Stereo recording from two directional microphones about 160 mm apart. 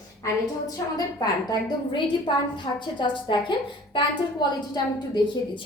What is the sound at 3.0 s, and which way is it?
A woman's voice, 30° left (ahead or behind).